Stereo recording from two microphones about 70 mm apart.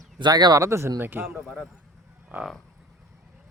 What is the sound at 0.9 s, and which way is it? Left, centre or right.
Speech, right.